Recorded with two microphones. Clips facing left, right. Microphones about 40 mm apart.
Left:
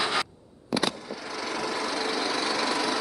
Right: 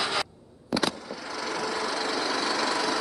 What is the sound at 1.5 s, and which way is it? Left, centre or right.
Wood, left.